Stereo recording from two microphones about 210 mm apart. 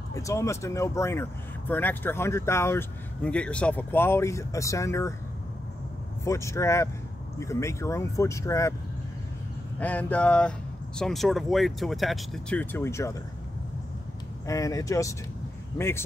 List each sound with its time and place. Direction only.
0.1 s speech: 15° left (ahead or behind)
6.2 s speech: 15° left (ahead or behind)
9.8 s speech: 5° left (ahead or behind)
14.4 s speech: 15° left (ahead or behind)